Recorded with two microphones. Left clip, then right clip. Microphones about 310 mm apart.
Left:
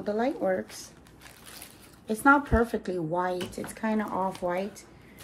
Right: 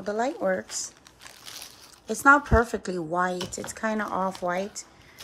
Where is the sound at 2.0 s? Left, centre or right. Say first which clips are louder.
Right 3 dB; right.